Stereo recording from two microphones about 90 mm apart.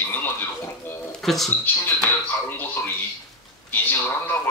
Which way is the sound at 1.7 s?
20° left (ahead or behind).